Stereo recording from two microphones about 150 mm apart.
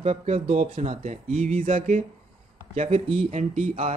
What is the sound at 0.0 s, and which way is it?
Speech, 50° right (ahead or behind).